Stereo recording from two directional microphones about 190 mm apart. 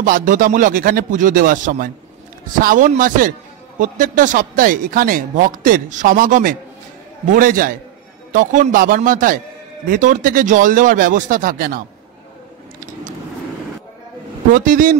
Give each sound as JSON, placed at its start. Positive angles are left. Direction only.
{"t": 0.0, "sound": "speech", "side_deg": -45}
{"t": 14.5, "sound": "speech", "side_deg": -45}